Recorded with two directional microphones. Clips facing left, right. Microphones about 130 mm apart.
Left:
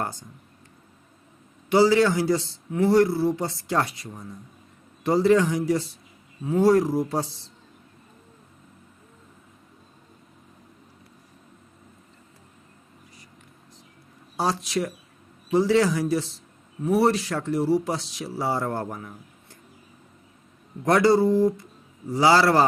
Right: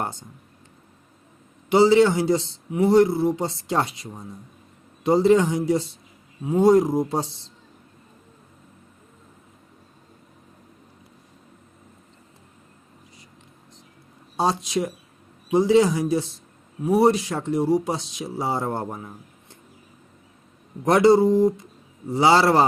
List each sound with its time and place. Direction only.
0.0 s speech: 25° right (ahead or behind)
1.7 s speech: 25° right (ahead or behind)
14.3 s speech: 20° right (ahead or behind)
20.8 s speech: 20° right (ahead or behind)